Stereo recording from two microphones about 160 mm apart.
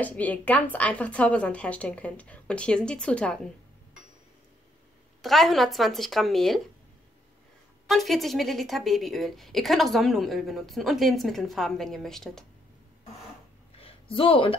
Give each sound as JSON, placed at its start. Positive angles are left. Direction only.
{"t": 0.0, "sound": "a woman's voice", "side_deg": 10}
{"t": 5.2, "sound": "a woman's voice", "side_deg": 0}
{"t": 7.8, "sound": "a woman's voice", "side_deg": 0}
{"t": 13.7, "sound": "a sound", "side_deg": 35}